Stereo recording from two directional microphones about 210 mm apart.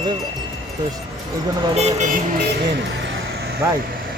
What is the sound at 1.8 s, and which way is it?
Speech, 30° right (ahead or behind).